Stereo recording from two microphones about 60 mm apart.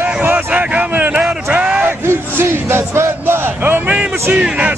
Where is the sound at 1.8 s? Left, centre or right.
Right.